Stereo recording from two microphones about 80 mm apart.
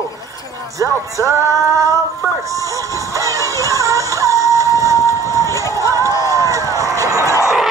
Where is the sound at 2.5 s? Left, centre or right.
Right.